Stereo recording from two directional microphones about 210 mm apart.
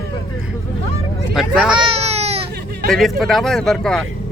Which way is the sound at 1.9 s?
30° right (ahead or behind).